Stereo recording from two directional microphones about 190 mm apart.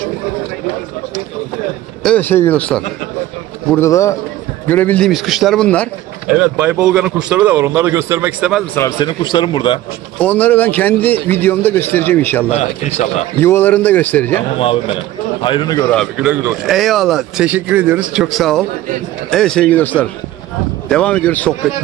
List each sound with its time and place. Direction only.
2.0 s a man's voice: 10° left (ahead or behind)
6.2 s a man's voice: 5° right (ahead or behind)
8.7 s a man's voice: 20° left (ahead or behind)
10.1 s a man's voice: 10° left (ahead or behind)
12.4 s a man's voice: 35° left (ahead or behind)
13.4 s a man's voice: 10° left (ahead or behind)
14.6 s a man's voice: 30° left (ahead or behind)
15.9 s a man's voice: 5° left (ahead or behind)